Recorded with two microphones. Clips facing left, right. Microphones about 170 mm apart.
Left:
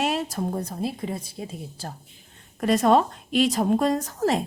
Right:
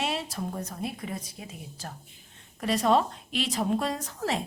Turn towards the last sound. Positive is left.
turn(degrees=45)  # may be behind; listen again after turning